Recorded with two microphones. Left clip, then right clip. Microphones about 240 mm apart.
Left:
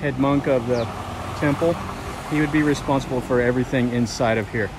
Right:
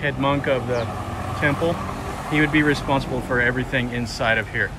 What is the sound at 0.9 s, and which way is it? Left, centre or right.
Vehicle, centre.